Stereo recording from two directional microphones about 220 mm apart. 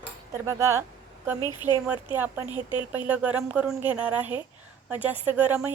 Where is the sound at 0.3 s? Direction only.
10° right (ahead or behind).